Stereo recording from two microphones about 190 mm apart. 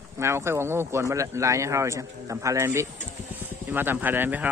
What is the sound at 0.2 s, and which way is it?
Speech, 15° right (ahead or behind).